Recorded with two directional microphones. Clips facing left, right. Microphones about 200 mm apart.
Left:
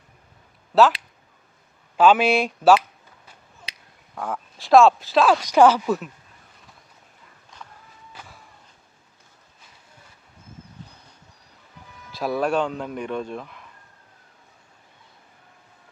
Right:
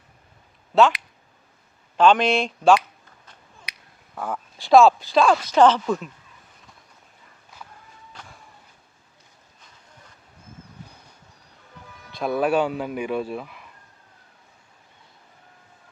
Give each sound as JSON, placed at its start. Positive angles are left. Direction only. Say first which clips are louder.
{"t": 2.0, "sound": "speech", "louder": "left 1 dB", "side_deg": 5}
{"t": 3.7, "sound": "finger snapping", "louder": "even", "side_deg": 25}
{"t": 4.1, "sound": "speech", "louder": "even", "side_deg": 0}
{"t": 8.1, "sound": "a sound", "louder": "left 1 dB", "side_deg": 5}
{"t": 12.1, "sound": "speech", "louder": "right 1 dB", "side_deg": 0}